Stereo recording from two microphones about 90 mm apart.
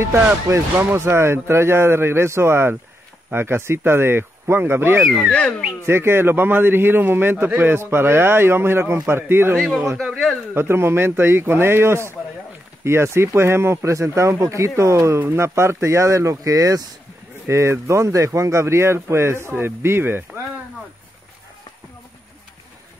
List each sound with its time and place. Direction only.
0.0 s a man's voice: 30° right (ahead or behind)
5.0 s speech: centre (ahead or behind)
5.3 s speech: 10° left (ahead or behind)
5.9 s a man's voice: 25° right (ahead or behind)
10.0 s speech: centre (ahead or behind)
10.5 s a man's voice: 25° right (ahead or behind)